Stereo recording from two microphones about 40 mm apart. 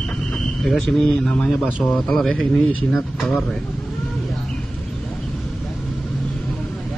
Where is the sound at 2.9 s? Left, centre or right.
Centre.